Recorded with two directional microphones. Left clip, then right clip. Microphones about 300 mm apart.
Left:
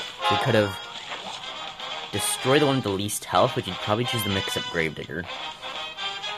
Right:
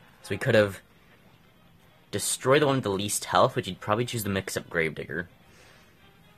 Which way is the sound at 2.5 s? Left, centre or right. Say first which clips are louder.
Left 1 dB; centre.